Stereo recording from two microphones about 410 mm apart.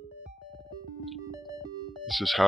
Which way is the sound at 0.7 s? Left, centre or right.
Centre.